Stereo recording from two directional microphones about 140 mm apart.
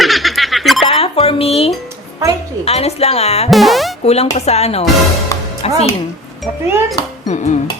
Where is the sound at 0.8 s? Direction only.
40° left (ahead or behind).